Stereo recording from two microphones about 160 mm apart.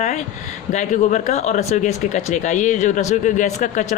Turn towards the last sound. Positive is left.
turn(degrees=50)  # may be behind; listen again after turning